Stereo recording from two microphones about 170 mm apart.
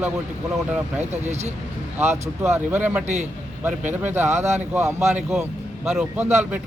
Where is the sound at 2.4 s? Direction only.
15° right (ahead or behind).